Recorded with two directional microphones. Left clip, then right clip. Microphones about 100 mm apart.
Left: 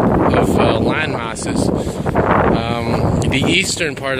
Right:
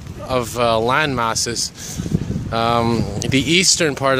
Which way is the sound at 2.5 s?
50° right (ahead or behind).